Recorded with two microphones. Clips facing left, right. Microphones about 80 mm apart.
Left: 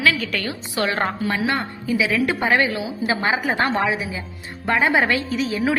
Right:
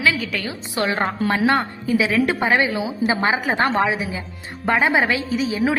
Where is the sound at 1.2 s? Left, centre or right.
Right.